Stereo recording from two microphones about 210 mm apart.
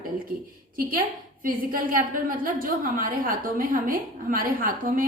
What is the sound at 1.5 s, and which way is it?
A woman's voice, 40° right (ahead or behind).